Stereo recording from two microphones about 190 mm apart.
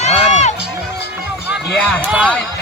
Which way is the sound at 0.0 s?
35° left (ahead or behind).